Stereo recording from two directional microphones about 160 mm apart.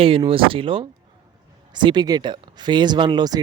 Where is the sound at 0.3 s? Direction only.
35° right (ahead or behind).